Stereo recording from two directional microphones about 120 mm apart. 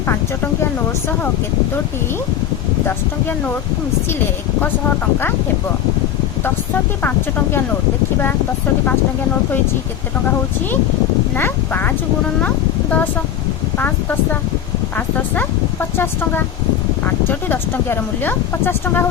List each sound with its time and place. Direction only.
2.8 s speech: 15° left (ahead or behind)
11.3 s speech: 15° left (ahead or behind)
13.7 s speech: 15° left (ahead or behind)